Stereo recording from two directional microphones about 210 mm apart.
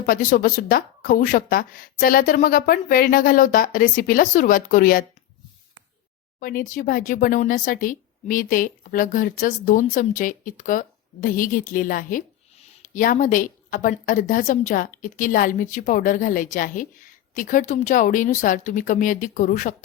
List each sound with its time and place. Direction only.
0.0 s a woman's voice: 45° left (ahead or behind)
6.4 s a woman's voice: 40° left (ahead or behind)